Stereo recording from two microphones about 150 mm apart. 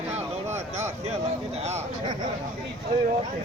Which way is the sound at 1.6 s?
45° right (ahead or behind).